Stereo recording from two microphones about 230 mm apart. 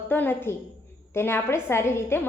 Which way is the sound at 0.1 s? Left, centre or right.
Centre.